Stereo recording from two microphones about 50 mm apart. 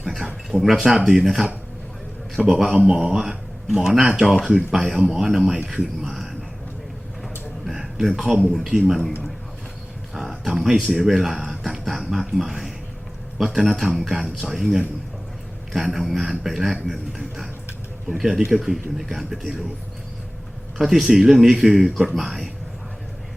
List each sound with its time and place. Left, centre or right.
0.0 s a sound: centre
0.5 s speech: centre
3.0 s speech: centre
7.7 s a sound: centre
8.5 s a man's voice: centre
10.2 s speech: centre
11.6 s a sound: centre
12.4 s a man's voice: centre
20.7 s a man's voice: centre
21.8 s speech: centre
22.1 s a man's voice: centre